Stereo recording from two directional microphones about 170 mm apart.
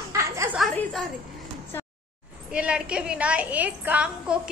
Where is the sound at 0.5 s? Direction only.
Centre (ahead or behind).